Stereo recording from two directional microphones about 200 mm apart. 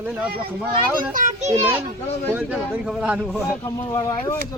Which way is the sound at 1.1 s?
35° right (ahead or behind).